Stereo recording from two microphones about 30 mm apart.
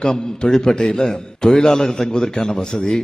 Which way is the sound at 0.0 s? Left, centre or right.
Left.